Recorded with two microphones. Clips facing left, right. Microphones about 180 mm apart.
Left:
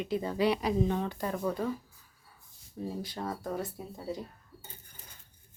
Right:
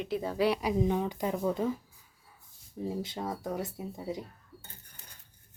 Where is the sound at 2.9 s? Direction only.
20° right (ahead or behind).